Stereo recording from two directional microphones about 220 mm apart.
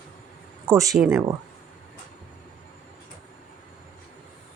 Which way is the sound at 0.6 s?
15° right (ahead or behind).